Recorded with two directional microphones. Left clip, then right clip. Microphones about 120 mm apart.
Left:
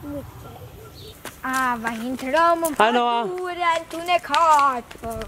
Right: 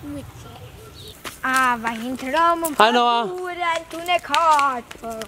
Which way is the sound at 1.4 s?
30° right (ahead or behind).